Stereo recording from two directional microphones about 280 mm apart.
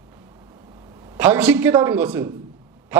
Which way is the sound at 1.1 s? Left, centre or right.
Centre.